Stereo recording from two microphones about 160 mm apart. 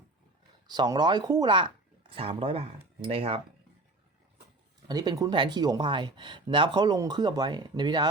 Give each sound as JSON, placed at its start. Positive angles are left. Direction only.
{"t": 0.7, "sound": "speech", "side_deg": -25}
{"t": 4.9, "sound": "speech", "side_deg": -25}